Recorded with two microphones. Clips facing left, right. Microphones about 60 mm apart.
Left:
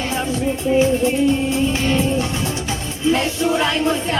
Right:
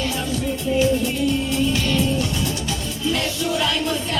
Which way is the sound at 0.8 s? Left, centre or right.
Left.